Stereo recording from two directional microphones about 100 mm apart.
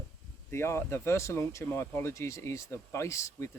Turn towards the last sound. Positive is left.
turn(degrees=30)  # may be behind; listen again after turning